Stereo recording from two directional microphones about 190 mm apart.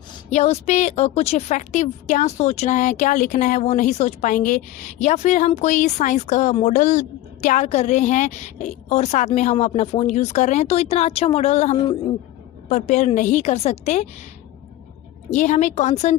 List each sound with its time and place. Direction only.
0.3 s a woman's voice: 35° left (ahead or behind)
15.3 s a woman's voice: 40° left (ahead or behind)